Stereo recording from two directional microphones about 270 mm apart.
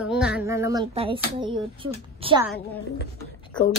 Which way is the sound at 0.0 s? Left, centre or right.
Centre.